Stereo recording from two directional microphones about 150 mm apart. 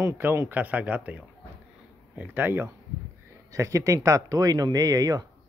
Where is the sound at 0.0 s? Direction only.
15° right (ahead or behind).